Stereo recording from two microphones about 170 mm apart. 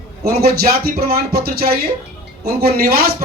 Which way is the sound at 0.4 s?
65° right (ahead or behind).